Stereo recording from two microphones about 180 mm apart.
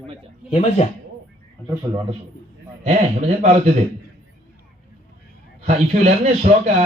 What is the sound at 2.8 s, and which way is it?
Speech, 40° right (ahead or behind).